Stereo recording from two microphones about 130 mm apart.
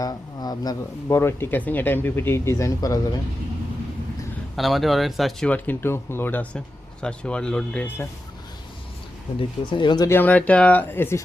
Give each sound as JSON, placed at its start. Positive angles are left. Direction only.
{"t": 0.0, "sound": "speech", "side_deg": 30}
{"t": 1.0, "sound": "speech", "side_deg": 20}
{"t": 4.5, "sound": "speech", "side_deg": 0}
{"t": 5.5, "sound": "speech", "side_deg": 10}
{"t": 9.6, "sound": "speech", "side_deg": 40}
{"t": 10.1, "sound": "speech", "side_deg": 15}